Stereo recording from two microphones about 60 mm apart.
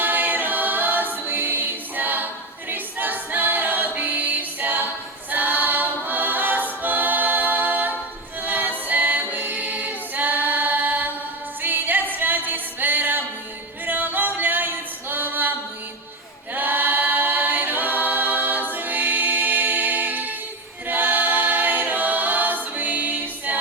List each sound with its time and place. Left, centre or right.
0.0 s a capella: right
8.4 s choir: right
8.9 s a capella: right
11.6 s music: right
16.6 s a capella: right
18.7 s music: right
20.8 s choir: right